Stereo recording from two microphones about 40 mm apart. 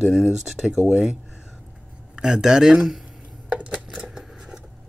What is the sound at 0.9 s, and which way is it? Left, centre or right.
Speech, centre.